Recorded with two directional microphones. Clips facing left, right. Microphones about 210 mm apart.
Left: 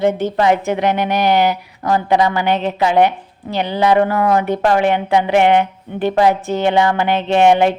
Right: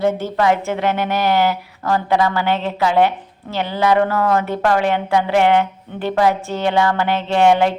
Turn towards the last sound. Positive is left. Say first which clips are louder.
# left 2 dB
turn(degrees=20)  # may be behind; listen again after turning